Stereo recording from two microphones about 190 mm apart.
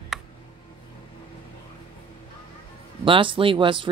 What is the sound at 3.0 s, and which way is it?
Speech, 25° right (ahead or behind).